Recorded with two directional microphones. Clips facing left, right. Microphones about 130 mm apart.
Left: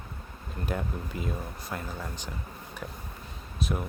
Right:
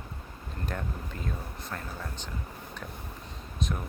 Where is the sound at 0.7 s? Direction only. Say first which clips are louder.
Left 4 dB; 10° left (ahead or behind).